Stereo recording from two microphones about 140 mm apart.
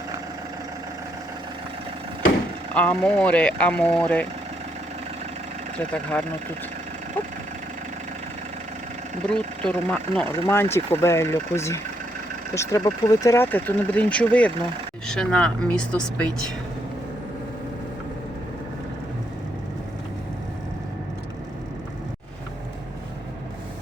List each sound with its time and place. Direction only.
2.7 s speech: 10° left (ahead or behind)
5.9 s speech: 10° left (ahead or behind)
9.3 s speech: 10° left (ahead or behind)
10.5 s speech: 20° left (ahead or behind)